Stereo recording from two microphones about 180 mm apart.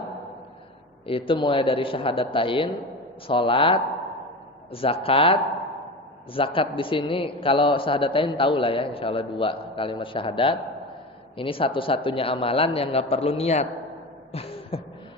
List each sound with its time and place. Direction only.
1.0 s a man's voice: 30° left (ahead or behind)
14.3 s beatboxing: 30° left (ahead or behind)